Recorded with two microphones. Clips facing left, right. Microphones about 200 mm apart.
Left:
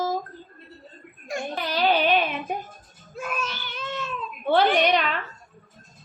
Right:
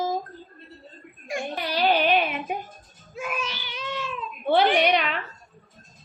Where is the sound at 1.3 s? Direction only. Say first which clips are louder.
Even; 10° right (ahead or behind).